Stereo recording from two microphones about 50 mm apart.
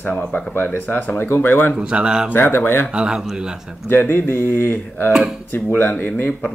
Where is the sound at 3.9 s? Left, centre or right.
Left.